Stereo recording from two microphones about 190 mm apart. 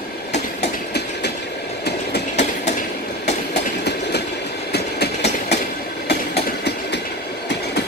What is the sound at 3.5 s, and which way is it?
Train, 60° left (ahead or behind).